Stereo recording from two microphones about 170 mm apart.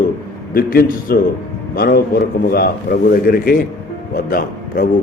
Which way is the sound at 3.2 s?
60° left (ahead or behind).